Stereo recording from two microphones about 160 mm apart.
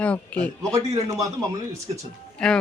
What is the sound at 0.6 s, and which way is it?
Speech, 20° right (ahead or behind).